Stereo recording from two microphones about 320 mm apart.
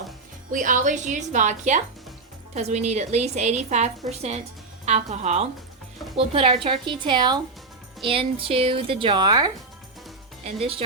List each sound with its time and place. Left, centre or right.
0.5 s a woman's voice: right